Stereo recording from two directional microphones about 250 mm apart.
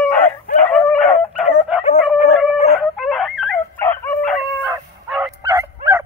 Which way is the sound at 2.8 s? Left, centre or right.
Centre.